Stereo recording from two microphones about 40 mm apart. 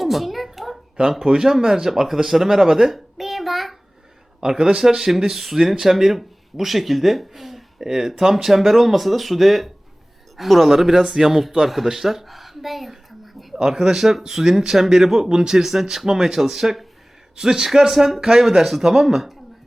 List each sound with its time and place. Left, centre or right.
0.0 s a sound: centre
1.2 s speech: centre
4.4 s a man's voice: right
4.8 s a woman's voice: centre
17.3 s speech: centre